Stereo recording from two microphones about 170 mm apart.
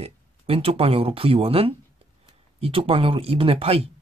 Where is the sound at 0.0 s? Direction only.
35° right (ahead or behind).